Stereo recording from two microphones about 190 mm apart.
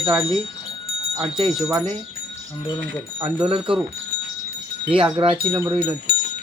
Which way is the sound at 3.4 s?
30° right (ahead or behind).